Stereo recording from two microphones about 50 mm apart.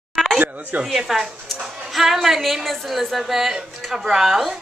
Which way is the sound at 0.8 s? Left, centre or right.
Centre.